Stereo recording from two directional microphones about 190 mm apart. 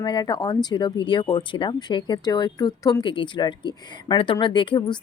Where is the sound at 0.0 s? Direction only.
20° left (ahead or behind).